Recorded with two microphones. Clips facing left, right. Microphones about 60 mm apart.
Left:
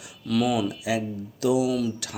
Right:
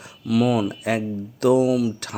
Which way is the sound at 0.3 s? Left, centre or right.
Centre.